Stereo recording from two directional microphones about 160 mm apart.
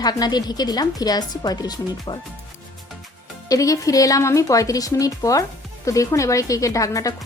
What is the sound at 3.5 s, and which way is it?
Speech, 20° left (ahead or behind).